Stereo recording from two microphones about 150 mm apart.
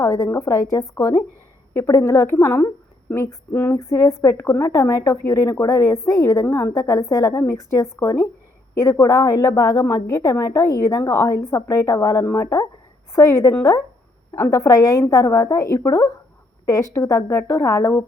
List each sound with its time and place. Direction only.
0.0 s a woman's voice: 20° left (ahead or behind)
1.7 s a sound: 20° left (ahead or behind)
4.2 s a woman's voice: 20° left (ahead or behind)